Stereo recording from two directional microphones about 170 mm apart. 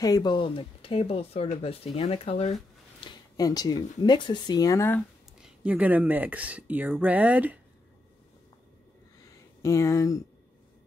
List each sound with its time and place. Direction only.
0.0 s speech: 25° left (ahead or behind)
3.0 s speech: 20° left (ahead or behind)
5.6 s speech: 10° right (ahead or behind)
9.6 s speech: 15° left (ahead or behind)